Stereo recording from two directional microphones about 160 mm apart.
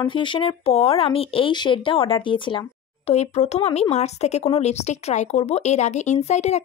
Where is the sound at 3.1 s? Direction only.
45° left (ahead or behind).